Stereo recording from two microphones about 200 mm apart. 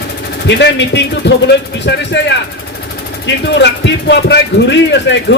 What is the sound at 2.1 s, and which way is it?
Speech, 60° left (ahead or behind).